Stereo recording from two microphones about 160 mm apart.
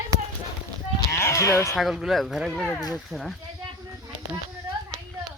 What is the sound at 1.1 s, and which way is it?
Sheep, 20° left (ahead or behind).